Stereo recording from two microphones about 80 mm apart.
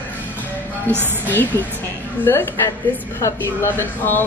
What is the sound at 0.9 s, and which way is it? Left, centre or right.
Speech, left.